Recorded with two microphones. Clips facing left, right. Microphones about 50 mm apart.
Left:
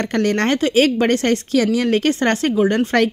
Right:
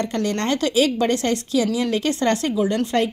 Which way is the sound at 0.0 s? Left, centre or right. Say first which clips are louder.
Left 5 dB; left.